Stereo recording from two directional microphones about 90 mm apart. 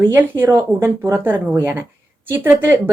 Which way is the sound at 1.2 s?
25° right (ahead or behind).